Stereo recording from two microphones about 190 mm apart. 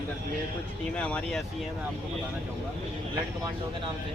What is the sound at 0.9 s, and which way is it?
Speech, 5° left (ahead or behind).